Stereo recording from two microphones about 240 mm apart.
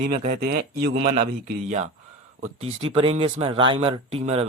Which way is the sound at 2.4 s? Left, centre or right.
Right.